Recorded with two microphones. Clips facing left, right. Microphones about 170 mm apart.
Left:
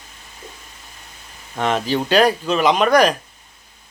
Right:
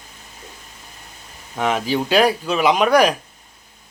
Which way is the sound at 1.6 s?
10° right (ahead or behind).